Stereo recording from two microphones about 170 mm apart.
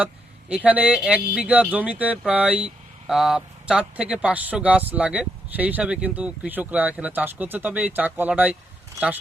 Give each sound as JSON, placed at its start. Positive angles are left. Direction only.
{"t": 0.0, "sound": "speech", "side_deg": -5}